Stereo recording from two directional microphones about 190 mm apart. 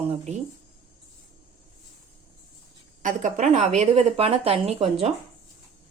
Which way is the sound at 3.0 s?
40° right (ahead or behind).